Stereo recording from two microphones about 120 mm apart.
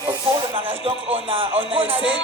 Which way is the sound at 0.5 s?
55° right (ahead or behind).